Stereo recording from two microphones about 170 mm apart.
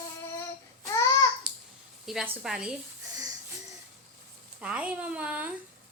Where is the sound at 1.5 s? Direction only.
5° right (ahead or behind).